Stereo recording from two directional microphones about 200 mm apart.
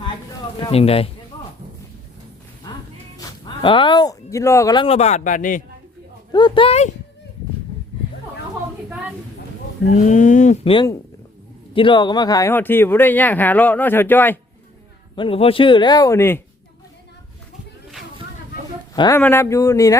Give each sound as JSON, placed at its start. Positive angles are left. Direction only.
{"t": 0.6, "sound": "speech", "side_deg": 30}
{"t": 3.2, "sound": "speech", "side_deg": 20}
{"t": 6.3, "sound": "speech", "side_deg": 25}
{"t": 9.9, "sound": "speech", "side_deg": 40}
{"t": 15.1, "sound": "speech", "side_deg": 25}
{"t": 18.9, "sound": "speech", "side_deg": 20}